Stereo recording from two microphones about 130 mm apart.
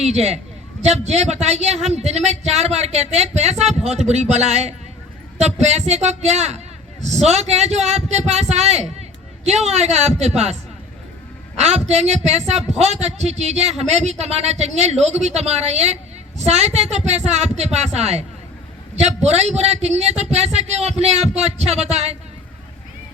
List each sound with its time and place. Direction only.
0.0 s a man's voice: 55° right (ahead or behind)
11.6 s a woman's voice: 55° right (ahead or behind)